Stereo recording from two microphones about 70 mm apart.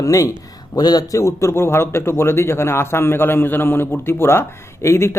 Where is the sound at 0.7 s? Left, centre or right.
Left.